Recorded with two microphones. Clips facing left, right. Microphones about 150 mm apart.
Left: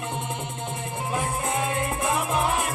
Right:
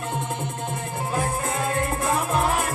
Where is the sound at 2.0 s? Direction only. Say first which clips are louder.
Right 1 dB; 20° left (ahead or behind).